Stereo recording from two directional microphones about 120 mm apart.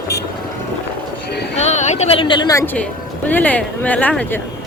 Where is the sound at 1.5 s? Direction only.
70° left (ahead or behind).